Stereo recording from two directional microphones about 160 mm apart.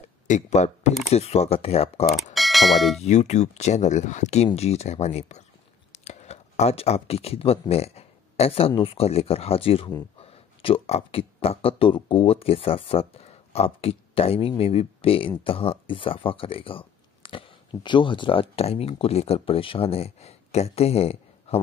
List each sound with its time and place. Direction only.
0.3 s speech: 45° left (ahead or behind)
2.3 s mechanisms: centre (ahead or behind)
3.0 s speech: 45° left (ahead or behind)